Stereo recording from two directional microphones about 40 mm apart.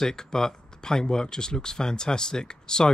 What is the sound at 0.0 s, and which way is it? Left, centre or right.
Speech, centre.